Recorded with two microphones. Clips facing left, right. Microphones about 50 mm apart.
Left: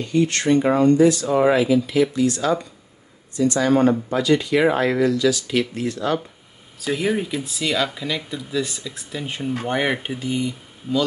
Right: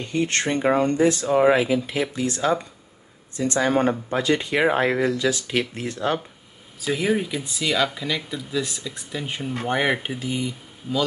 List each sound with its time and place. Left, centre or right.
0.0 s speech: right
6.8 s speech: centre